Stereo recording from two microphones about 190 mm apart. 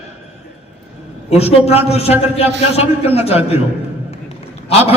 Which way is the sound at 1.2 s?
30° left (ahead or behind).